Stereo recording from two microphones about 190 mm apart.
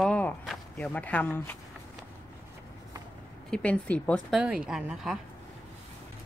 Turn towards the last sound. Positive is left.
turn(degrees=-5)  # may be behind; listen again after turning